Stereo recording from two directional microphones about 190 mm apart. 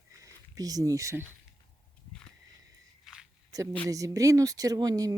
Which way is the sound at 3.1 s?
Centre (ahead or behind).